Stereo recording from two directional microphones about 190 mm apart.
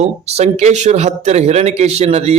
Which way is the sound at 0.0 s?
35° right (ahead or behind).